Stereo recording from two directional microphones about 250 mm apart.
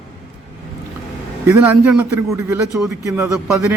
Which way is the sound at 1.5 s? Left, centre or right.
Centre.